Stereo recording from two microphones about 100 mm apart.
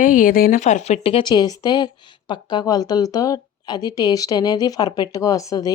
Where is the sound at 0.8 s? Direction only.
80° left.